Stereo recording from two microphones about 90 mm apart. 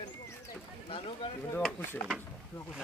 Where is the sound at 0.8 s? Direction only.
90° left.